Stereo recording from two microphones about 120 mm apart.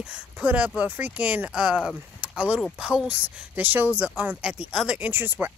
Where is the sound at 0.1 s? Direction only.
10° right (ahead or behind).